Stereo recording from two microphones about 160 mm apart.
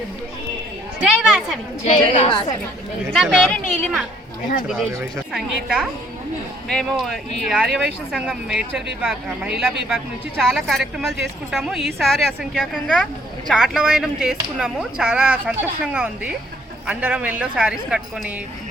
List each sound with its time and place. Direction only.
1.0 s speech: centre (ahead or behind)
1.8 s a woman's voice: 45° left (ahead or behind)
3.1 s a woman's voice: 5° left (ahead or behind)